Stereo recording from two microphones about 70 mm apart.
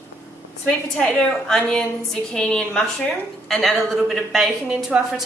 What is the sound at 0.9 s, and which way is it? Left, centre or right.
A woman's voice, centre.